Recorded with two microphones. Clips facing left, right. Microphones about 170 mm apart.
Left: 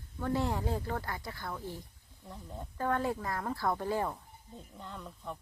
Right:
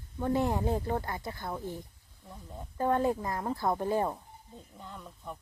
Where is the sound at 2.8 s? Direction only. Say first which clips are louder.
Right 4 dB; 20° right (ahead or behind).